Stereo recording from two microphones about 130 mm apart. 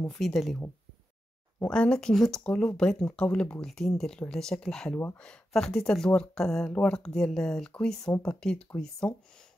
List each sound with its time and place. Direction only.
0.1 s speech: centre (ahead or behind)
1.6 s speech: 5° left (ahead or behind)